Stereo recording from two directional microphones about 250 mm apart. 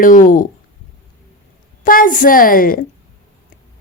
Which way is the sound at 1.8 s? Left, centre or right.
Left.